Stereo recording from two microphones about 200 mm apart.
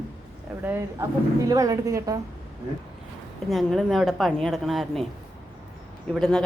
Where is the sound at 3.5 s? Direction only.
Centre (ahead or behind).